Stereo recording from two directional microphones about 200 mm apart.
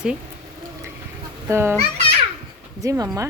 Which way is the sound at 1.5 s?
10° right (ahead or behind).